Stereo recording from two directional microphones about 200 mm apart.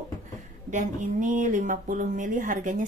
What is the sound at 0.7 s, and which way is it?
Speech, 40° right (ahead or behind).